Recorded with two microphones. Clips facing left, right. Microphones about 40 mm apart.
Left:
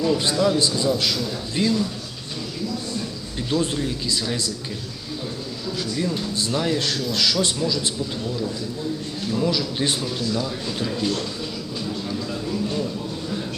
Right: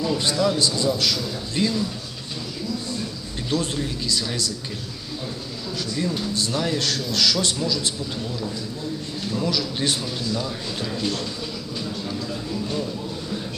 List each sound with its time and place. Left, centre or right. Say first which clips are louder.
0.0 s a man's voice: left 2 dB; centre
3.5 s a man's voice: left 2 dB; centre
5.9 s a man's voice: right 1 dB; centre
9.2 s speech: left 2 dB; centre
12.3 s speech: left 3 dB; centre